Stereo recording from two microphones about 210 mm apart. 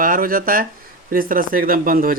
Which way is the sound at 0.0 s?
40° right (ahead or behind).